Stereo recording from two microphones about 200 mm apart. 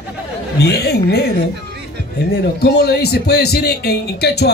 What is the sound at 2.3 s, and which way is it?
A man's voice, 55° left (ahead or behind).